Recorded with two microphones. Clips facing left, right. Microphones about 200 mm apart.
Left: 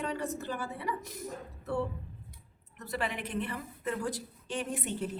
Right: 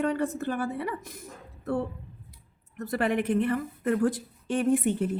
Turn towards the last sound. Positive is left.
turn(degrees=-55)  # may be behind; listen again after turning